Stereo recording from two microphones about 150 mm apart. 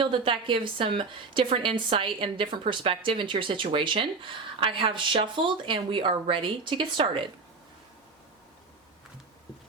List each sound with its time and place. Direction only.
0.0 s a woman's voice: 35° right (ahead or behind)